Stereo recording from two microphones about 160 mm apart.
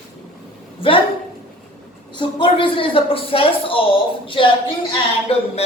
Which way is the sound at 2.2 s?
30° left (ahead or behind).